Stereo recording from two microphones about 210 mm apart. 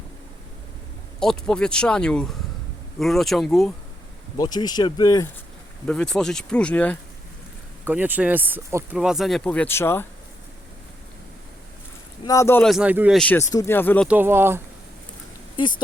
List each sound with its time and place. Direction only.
1.2 s speech: 5° left (ahead or behind)
4.4 s speech: 20° left (ahead or behind)
5.8 s speech: 5° left (ahead or behind)
7.9 s speech: 10° right (ahead or behind); by 10.1 s 10° left (ahead or behind)
12.2 s speech: 15° left (ahead or behind)
12.7 s speech: 5° right (ahead or behind)
13.1 s speech: 5° left (ahead or behind)
14.1 s speech: 10° right (ahead or behind)